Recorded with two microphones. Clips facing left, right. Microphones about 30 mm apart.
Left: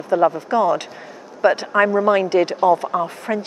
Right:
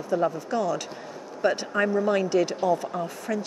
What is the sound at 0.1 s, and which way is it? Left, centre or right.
A woman's voice, left.